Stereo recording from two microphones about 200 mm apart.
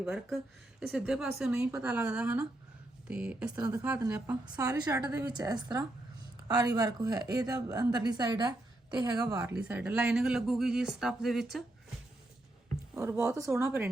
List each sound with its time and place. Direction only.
0.0 s a woman's voice: centre (ahead or behind)
5.3 s a woman's voice: 20° right (ahead or behind)
9.6 s speech: 5° right (ahead or behind)
12.9 s a woman's voice: 10° right (ahead or behind)